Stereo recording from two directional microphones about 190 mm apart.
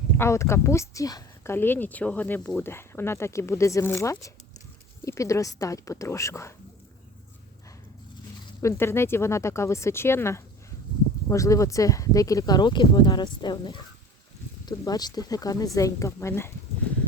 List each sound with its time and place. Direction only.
0.2 s speech: 15° left (ahead or behind)
8.6 s speech: 15° left (ahead or behind)